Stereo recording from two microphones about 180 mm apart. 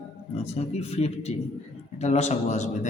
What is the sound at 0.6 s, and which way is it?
A man's voice, 35° left (ahead or behind).